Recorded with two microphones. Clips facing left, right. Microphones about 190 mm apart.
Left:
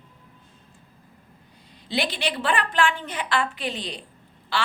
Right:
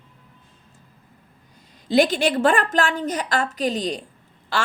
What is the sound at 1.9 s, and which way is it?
A woman's voice, 45° right (ahead or behind).